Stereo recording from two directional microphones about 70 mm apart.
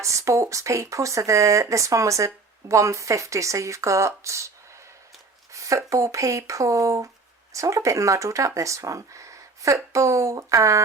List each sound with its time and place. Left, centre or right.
0.0 s speech: right
5.5 s speech: right